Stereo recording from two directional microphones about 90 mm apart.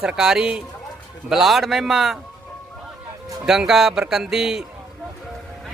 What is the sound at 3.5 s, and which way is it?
A man's voice, 5° right (ahead or behind).